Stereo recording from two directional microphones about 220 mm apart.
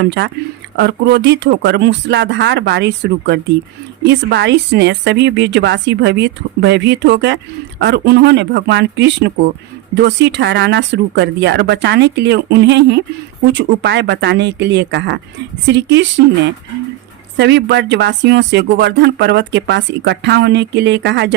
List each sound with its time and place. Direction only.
0.0 s speech: 50° right (ahead or behind)
17.3 s speech: 50° right (ahead or behind)